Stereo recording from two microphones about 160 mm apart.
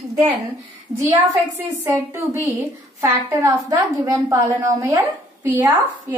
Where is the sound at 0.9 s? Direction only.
20° right (ahead or behind).